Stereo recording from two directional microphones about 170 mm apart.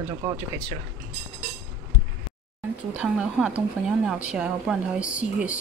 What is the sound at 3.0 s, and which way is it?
Speech, 5° right (ahead or behind).